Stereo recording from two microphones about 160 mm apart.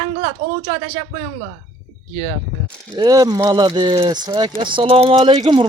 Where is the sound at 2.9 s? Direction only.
25° right (ahead or behind).